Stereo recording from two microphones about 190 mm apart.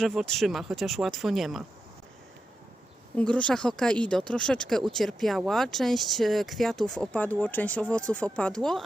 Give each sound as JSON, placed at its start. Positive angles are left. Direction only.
{"t": 0.0, "sound": "speech", "side_deg": 0}
{"t": 3.2, "sound": "speech", "side_deg": 5}